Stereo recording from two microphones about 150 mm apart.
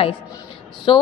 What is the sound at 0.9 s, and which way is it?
Speech, 35° left (ahead or behind).